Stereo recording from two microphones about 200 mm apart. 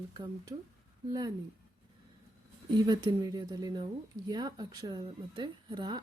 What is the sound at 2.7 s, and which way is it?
Speech, 20° right (ahead or behind).